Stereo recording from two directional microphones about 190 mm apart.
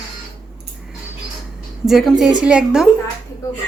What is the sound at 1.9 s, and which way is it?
Speech, centre (ahead or behind).